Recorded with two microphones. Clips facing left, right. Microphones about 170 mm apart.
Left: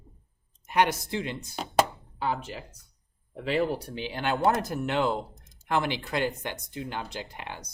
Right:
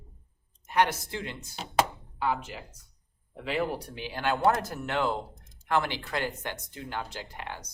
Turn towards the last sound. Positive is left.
turn(degrees=20)  # may be behind; listen again after turning